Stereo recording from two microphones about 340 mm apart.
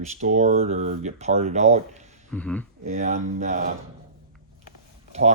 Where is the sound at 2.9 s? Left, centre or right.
Right.